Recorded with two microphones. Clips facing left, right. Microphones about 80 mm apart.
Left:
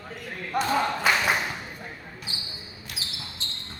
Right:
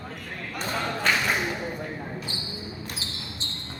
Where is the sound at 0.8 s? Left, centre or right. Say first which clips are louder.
Left 2 dB; centre.